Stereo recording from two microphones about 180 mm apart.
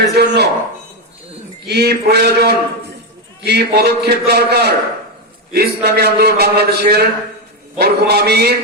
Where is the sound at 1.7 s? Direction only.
65° right (ahead or behind).